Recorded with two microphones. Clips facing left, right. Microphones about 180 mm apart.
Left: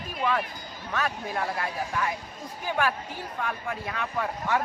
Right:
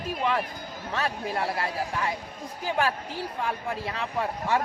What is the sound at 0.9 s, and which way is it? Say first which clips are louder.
Speech: right 1 dB; 30° right (ahead or behind).